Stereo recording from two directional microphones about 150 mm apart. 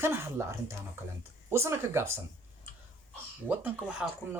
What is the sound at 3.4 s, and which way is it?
Speech, 10° right (ahead or behind).